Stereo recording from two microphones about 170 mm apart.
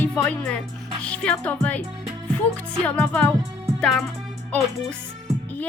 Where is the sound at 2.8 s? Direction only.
10° left (ahead or behind).